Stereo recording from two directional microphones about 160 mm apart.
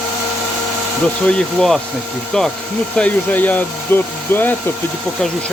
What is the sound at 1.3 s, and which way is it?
Speech, 5° left (ahead or behind).